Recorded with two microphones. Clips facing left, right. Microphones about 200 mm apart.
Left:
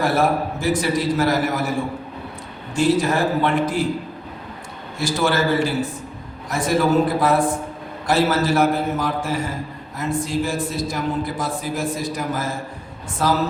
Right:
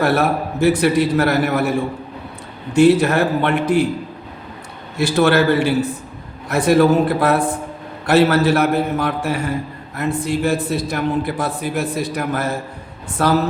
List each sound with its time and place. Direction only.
0.0 s a man's voice: 65° right (ahead or behind)
2.7 s a man's voice: 65° right (ahead or behind)
4.9 s a man's voice: 65° right (ahead or behind)